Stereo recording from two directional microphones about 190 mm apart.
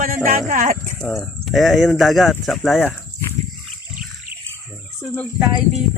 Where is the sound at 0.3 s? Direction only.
45° right (ahead or behind).